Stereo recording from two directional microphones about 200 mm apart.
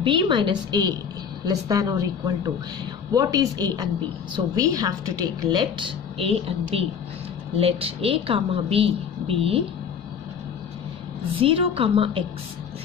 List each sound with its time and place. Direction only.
0.0 s a woman's voice: 25° right (ahead or behind)
11.3 s a woman's voice: 25° right (ahead or behind)